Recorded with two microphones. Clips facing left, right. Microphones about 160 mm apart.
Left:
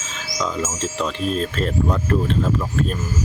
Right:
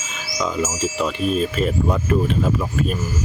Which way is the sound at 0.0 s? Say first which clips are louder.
Right 1 dB; 10° right (ahead or behind).